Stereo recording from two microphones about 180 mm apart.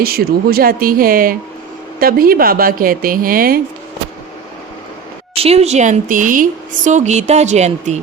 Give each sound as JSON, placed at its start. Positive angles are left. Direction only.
{"t": 0.0, "sound": "speech", "side_deg": -55}
{"t": 5.3, "sound": "a woman's voice", "side_deg": -35}